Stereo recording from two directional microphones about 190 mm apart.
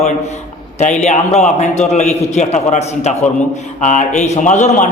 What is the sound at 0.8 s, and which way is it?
A man's voice, 40° left (ahead or behind).